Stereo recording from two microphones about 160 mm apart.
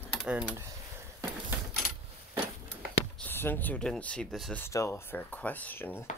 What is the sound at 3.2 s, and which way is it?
Speech, 15° left (ahead or behind).